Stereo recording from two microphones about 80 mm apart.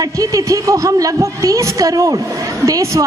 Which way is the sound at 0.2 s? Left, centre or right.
Right.